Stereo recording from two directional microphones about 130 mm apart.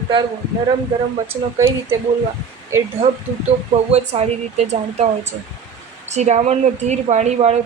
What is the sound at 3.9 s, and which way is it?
A woman's voice, 55° right (ahead or behind).